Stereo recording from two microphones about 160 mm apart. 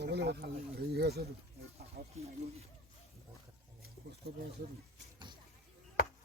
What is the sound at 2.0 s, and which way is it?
Speech, 70° right (ahead or behind).